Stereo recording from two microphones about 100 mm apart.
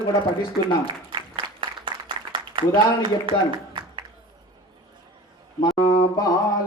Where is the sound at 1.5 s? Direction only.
60° right (ahead or behind).